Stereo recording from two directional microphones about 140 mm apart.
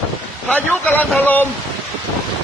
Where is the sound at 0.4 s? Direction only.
10° left (ahead or behind).